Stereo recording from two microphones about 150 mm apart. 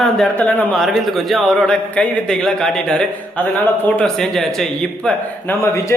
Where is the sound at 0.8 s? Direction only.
Centre (ahead or behind).